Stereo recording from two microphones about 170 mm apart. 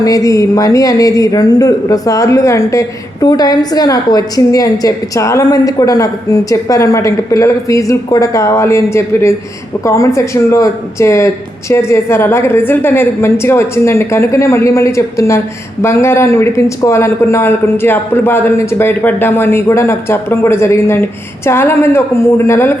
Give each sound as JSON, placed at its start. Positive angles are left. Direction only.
{"t": 0.0, "sound": "speech", "side_deg": 20}